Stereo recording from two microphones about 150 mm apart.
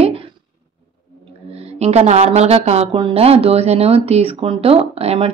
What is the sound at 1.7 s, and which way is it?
Speech, 45° right (ahead or behind).